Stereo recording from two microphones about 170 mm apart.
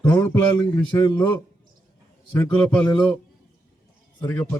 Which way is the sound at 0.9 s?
25° left (ahead or behind).